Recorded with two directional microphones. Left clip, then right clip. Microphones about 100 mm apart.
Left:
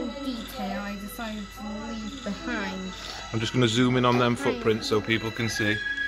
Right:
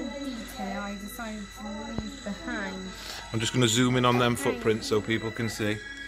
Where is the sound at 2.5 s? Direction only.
55° left (ahead or behind).